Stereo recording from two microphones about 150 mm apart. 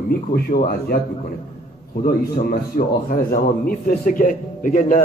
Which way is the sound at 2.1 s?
75° left (ahead or behind).